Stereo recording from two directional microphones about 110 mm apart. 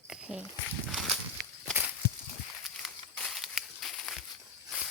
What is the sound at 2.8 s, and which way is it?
Crumpling, centre (ahead or behind).